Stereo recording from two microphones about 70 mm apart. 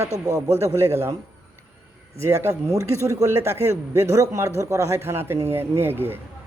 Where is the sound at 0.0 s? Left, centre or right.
Right.